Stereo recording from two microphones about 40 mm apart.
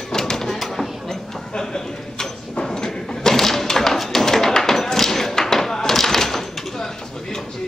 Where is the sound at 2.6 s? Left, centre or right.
Centre.